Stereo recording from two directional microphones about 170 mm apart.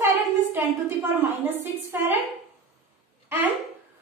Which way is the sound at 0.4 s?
10° right (ahead or behind).